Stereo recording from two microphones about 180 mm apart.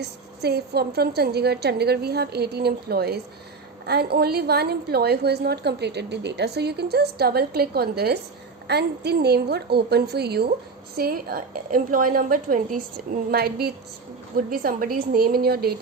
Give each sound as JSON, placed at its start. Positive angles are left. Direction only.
{"t": 0.0, "sound": "a woman's voice", "side_deg": -65}
{"t": 13.3, "sound": "a woman's voice", "side_deg": -60}